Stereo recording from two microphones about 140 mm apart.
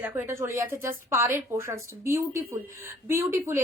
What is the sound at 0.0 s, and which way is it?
A woman's voice, 15° right (ahead or behind).